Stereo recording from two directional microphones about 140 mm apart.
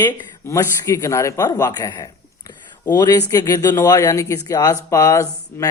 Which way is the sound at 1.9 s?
25° left (ahead or behind).